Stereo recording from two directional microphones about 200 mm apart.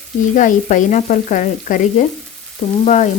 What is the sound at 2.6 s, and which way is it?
Frying, 25° left (ahead or behind).